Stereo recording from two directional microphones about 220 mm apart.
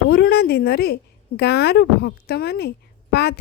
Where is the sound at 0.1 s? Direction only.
45° left (ahead or behind).